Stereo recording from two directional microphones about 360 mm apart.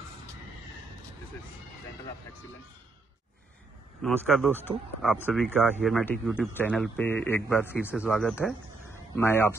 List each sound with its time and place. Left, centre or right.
4.0 s speech: centre